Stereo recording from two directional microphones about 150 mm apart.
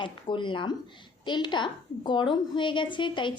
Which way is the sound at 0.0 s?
35° left (ahead or behind).